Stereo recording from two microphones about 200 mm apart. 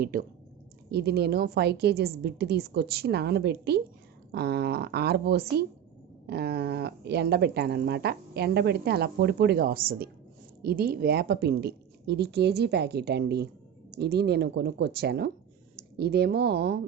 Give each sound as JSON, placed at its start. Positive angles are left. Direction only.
{"t": 0.0, "sound": "a woman's voice", "side_deg": -45}